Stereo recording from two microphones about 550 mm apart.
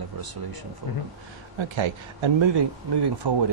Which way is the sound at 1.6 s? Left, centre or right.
Right.